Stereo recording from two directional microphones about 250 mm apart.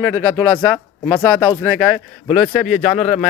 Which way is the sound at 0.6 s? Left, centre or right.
Centre.